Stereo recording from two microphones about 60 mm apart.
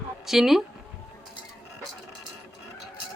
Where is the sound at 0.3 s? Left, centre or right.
Centre.